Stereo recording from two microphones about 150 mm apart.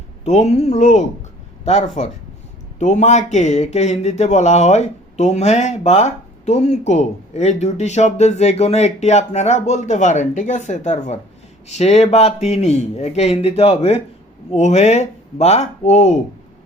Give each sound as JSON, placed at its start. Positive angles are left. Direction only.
{"t": 0.3, "sound": "speech", "side_deg": 45}